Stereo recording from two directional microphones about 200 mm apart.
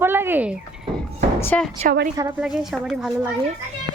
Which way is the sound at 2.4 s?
Centre (ahead or behind).